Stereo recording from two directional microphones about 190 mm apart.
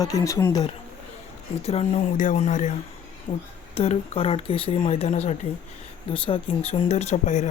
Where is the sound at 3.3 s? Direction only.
25° left (ahead or behind).